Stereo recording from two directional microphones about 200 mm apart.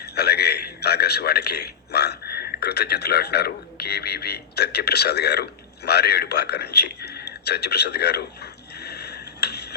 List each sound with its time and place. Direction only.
0.0 s a man's voice: 55° left (ahead or behind)